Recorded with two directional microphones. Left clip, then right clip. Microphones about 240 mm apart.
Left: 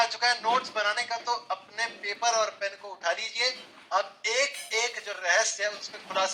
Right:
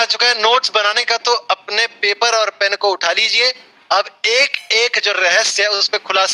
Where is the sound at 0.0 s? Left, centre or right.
Right.